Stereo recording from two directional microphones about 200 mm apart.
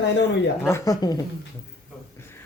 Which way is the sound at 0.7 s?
15° left (ahead or behind).